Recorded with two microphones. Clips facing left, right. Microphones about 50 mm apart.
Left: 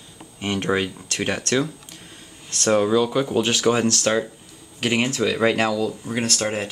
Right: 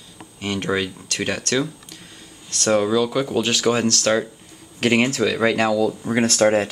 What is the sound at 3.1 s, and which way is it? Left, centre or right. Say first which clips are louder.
Speech: even; centre.